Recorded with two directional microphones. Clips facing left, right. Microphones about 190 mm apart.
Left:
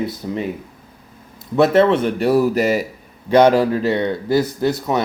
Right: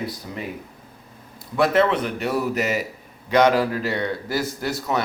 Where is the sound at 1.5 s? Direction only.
25° left (ahead or behind).